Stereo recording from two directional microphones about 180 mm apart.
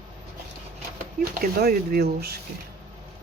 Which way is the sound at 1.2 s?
55° right (ahead or behind).